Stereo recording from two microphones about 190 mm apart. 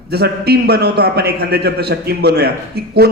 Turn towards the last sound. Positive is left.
turn(degrees=-55)  # may be behind; listen again after turning